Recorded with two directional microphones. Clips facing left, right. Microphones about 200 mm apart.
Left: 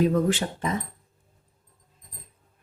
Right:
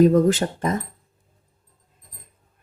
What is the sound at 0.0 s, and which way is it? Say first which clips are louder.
Speech: right 7 dB; 40° right (ahead or behind).